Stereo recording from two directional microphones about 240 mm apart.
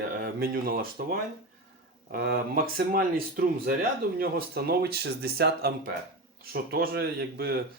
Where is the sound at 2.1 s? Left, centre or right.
Right.